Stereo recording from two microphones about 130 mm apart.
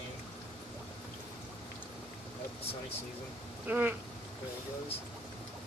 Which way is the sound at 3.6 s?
15° right (ahead or behind).